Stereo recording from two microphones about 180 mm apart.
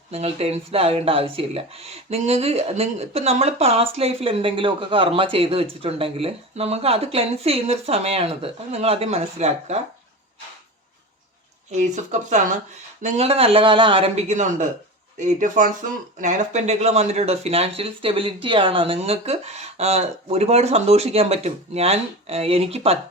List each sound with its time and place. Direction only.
0.1 s speech: 35° right (ahead or behind)
11.8 s speech: 40° right (ahead or behind)